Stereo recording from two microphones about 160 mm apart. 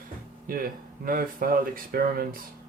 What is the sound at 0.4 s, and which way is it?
Speech, 60° right (ahead or behind).